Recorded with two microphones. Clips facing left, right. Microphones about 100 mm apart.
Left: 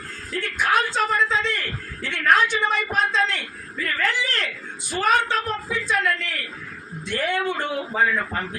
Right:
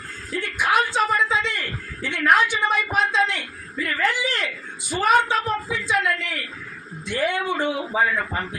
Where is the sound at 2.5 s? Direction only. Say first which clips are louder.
Right 1 dB; 10° right (ahead or behind).